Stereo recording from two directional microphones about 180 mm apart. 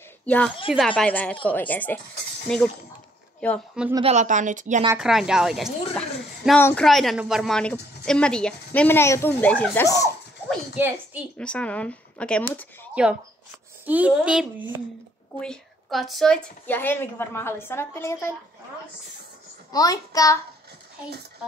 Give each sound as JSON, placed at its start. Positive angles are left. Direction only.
{"t": 0.2, "sound": "a woman's voice", "side_deg": 5}
{"t": 4.0, "sound": "speech", "side_deg": -40}
{"t": 4.9, "sound": "a woman's voice", "side_deg": -5}
{"t": 11.3, "sound": "a woman's voice", "side_deg": 5}
{"t": 12.9, "sound": "a woman's voice", "side_deg": -5}
{"t": 19.7, "sound": "a child's voice", "side_deg": 20}